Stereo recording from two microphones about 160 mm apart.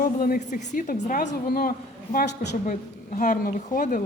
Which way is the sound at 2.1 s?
90° left.